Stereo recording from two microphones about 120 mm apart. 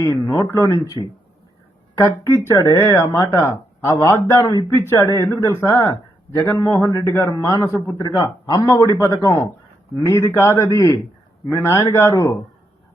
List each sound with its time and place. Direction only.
0.0 s a man's voice: 30° left (ahead or behind)
2.0 s a man's voice: 25° left (ahead or behind)